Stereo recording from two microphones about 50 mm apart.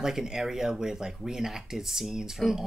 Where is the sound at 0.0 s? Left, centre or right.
Centre.